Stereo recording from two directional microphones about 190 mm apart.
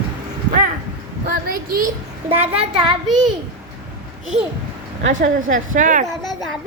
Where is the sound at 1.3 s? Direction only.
50° right (ahead or behind).